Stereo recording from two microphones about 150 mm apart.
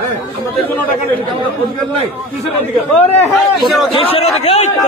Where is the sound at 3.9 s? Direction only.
40° left (ahead or behind).